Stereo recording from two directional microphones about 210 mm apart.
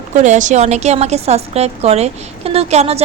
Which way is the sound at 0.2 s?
35° right (ahead or behind).